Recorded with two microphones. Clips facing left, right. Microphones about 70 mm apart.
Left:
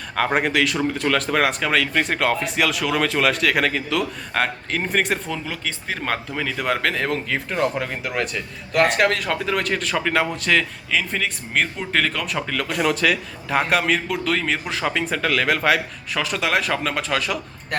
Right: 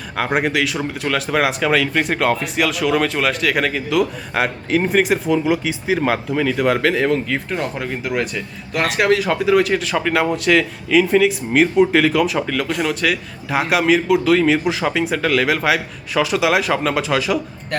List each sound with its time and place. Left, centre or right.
0.2 s speech: centre